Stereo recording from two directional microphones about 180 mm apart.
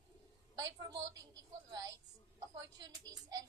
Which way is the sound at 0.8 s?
20° right (ahead or behind).